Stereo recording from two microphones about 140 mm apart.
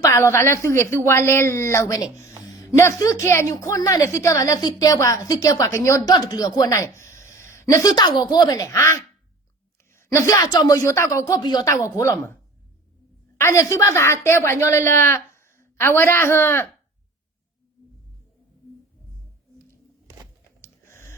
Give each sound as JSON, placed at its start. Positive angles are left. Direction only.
{"t": 0.0, "sound": "a woman's voice", "side_deg": 20}
{"t": 13.4, "sound": "speech", "side_deg": 20}
{"t": 20.6, "sound": "a sound", "side_deg": 20}